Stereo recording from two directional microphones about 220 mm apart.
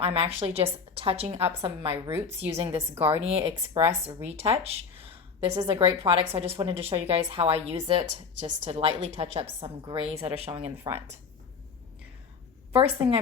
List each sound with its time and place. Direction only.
0.0 s a woman's voice: 25° right (ahead or behind)
5.5 s a woman's voice: 15° right (ahead or behind)
6.0 s a woman's voice: 25° right (ahead or behind)
12.7 s a woman's voice: 25° right (ahead or behind)